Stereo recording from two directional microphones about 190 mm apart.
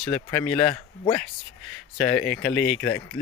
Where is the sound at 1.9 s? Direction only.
5° left (ahead or behind).